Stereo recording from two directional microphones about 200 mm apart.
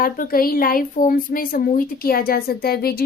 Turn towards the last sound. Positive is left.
turn(degrees=50)  # may be behind; listen again after turning